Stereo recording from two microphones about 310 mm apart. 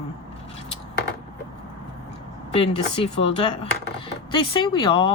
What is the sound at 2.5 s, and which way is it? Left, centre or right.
Speech, centre.